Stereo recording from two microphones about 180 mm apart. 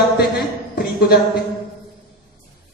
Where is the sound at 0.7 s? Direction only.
60° left (ahead or behind).